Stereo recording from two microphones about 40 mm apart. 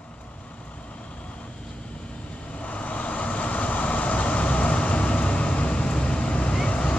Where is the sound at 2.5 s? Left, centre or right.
Left.